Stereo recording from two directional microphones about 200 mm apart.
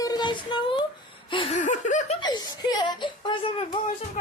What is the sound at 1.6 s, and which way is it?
Speech, 40° left (ahead or behind).